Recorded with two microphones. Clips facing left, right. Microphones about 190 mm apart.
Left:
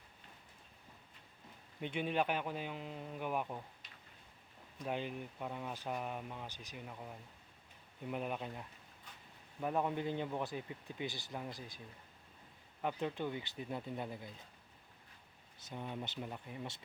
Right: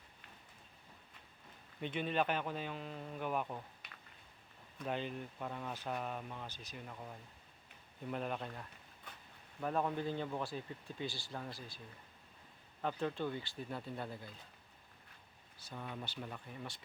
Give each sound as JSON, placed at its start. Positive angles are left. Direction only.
{"t": 1.8, "sound": "speech", "side_deg": 15}
{"t": 3.8, "sound": "a sound", "side_deg": -60}
{"t": 4.8, "sound": "speech", "side_deg": 10}
{"t": 12.8, "sound": "speech", "side_deg": 15}
{"t": 15.5, "sound": "speech", "side_deg": 20}